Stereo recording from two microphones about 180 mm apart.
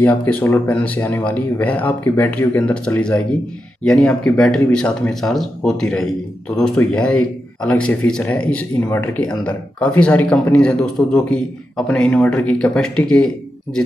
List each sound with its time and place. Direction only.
0.0 s speech: 10° left (ahead or behind)